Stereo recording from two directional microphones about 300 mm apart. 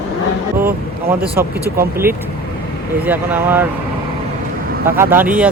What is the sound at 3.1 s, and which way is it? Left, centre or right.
Speech, centre.